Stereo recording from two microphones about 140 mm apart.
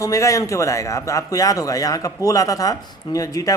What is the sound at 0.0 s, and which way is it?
A man's voice, 25° left (ahead or behind).